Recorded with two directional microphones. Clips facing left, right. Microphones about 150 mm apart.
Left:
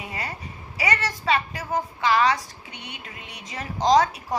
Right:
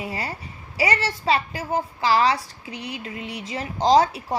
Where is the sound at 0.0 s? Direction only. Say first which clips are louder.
Right 3 dB; 30° right (ahead or behind).